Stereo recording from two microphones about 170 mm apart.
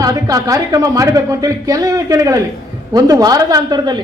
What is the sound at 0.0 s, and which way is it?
A man's voice, 20° right (ahead or behind).